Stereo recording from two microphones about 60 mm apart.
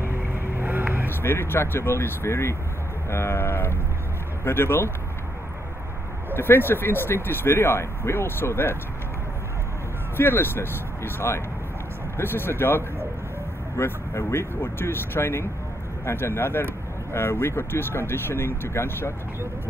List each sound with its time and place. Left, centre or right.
0.0 s boat: right
1.0 s speech: left
6.3 s speech: left
10.1 s speech: left